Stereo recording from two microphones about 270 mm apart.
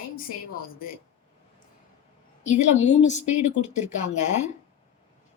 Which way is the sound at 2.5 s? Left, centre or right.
Left.